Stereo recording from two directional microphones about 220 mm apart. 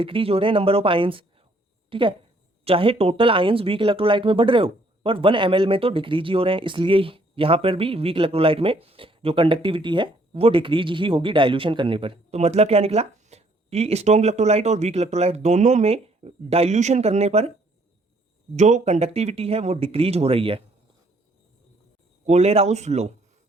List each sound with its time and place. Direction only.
0.0 s a woman's voice: 25° right (ahead or behind)
18.5 s speech: 30° right (ahead or behind)
22.3 s speech: 30° right (ahead or behind)